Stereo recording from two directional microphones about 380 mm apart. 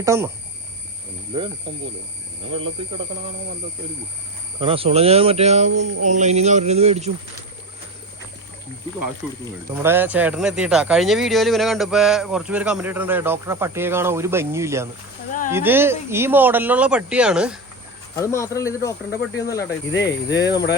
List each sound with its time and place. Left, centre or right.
0.0 s speech: centre
1.3 s speech: centre
2.5 s speech: right
4.6 s speech: centre
9.4 s speech: centre
19.5 s speech: left